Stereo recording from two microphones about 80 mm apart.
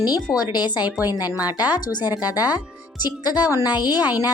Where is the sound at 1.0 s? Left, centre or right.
Left.